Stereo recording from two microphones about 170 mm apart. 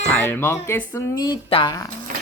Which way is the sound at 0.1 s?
10° left (ahead or behind).